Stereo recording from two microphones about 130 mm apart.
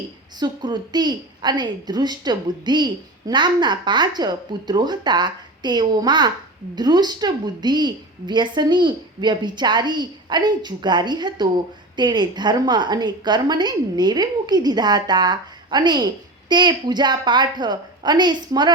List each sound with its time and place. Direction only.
0.3 s a woman's voice: 35° right (ahead or behind)